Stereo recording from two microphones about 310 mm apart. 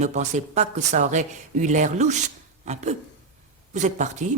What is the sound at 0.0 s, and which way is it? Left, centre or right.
Speech, right.